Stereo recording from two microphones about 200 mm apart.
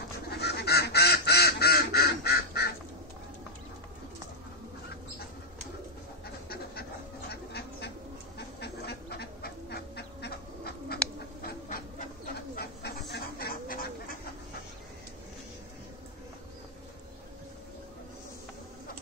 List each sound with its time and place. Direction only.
0.3 s duck: 55° left (ahead or behind)
6.5 s duck: 50° left (ahead or behind)
11.4 s bird: 45° left (ahead or behind)
13.1 s duck: 50° left (ahead or behind)